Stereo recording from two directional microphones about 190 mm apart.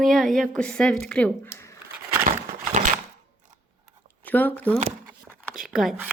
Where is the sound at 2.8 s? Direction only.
45° right (ahead or behind).